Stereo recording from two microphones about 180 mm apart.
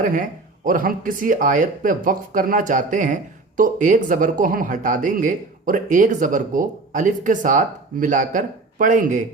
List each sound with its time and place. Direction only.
0.0 s speech: 50° right (ahead or behind)